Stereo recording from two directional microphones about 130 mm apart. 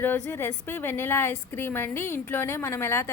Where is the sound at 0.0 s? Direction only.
15° left (ahead or behind).